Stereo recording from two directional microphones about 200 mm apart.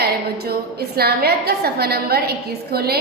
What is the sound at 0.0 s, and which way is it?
A woman's voice, 50° right (ahead or behind).